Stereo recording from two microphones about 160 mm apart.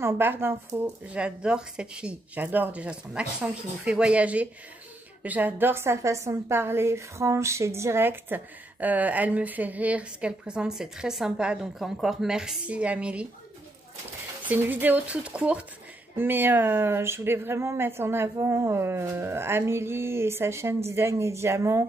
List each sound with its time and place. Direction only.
0.0 s a woman's voice: 15° right (ahead or behind)
14.5 s a woman's voice: 10° right (ahead or behind)